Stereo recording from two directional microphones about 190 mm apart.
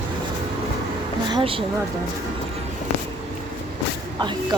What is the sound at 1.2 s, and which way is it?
Speech, 25° right (ahead or behind).